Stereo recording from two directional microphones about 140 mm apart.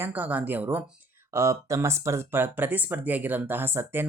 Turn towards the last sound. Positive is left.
turn(degrees=-15)  # may be behind; listen again after turning